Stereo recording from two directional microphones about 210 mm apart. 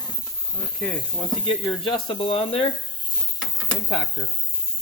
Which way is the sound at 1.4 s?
25° left (ahead or behind).